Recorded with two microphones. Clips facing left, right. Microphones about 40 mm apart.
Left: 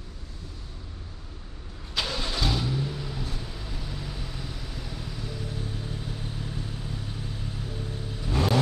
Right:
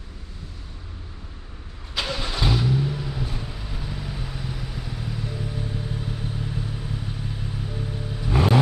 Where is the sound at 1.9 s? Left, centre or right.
Centre.